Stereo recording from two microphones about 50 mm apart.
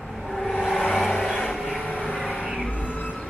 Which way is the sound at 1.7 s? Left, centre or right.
Left.